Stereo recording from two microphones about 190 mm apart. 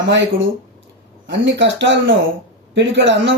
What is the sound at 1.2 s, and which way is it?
A man's voice, 70° right (ahead or behind).